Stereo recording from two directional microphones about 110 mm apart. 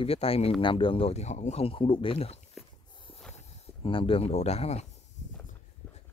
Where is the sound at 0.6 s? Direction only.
50° left (ahead or behind).